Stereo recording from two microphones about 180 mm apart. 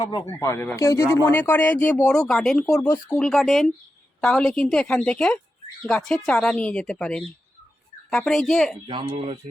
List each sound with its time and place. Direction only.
0.0 s speech: 20° left (ahead or behind); by 8.8 s centre (ahead or behind)
8.9 s speech: 30° right (ahead or behind)